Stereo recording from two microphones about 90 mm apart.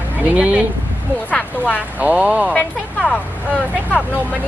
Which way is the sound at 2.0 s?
15° right (ahead or behind).